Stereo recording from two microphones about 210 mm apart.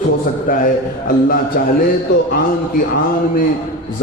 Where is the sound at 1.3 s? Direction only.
45° left (ahead or behind).